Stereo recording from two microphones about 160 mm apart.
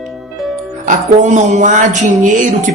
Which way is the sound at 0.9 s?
50° right (ahead or behind).